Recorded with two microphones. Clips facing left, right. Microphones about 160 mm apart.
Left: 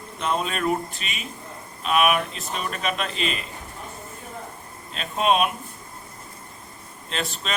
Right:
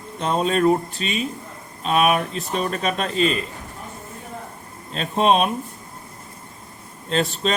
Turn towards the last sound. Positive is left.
turn(degrees=-35)  # may be behind; listen again after turning